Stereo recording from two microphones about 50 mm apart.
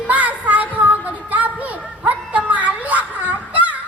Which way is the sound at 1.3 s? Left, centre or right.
Right.